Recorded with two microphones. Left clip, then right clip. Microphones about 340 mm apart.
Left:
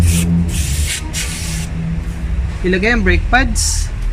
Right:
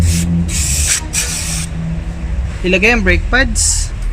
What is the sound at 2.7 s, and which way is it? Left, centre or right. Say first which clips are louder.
Speech: right 3 dB; centre.